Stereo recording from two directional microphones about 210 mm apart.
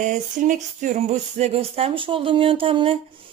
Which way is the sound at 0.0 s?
35° right (ahead or behind).